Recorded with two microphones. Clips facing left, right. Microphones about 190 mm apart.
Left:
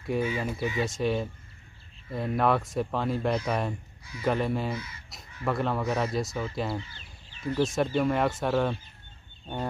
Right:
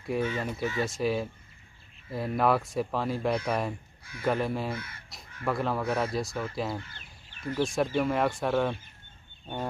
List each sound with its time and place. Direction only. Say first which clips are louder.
0.0 s speech: left 1 dB; 5° left (ahead or behind)
4.7 s speech: left 2 dB; 55° right (ahead or behind)
5.1 s speech: left 1 dB; centre (ahead or behind)
6.8 s a sound: left 2 dB; 55° right (ahead or behind)
7.5 s speech: left 1 dB; centre (ahead or behind)